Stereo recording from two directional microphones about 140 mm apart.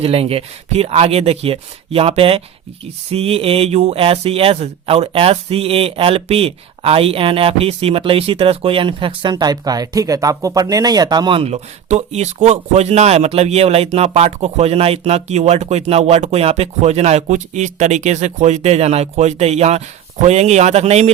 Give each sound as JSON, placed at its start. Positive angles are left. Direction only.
{"t": 0.0, "sound": "speech", "side_deg": -45}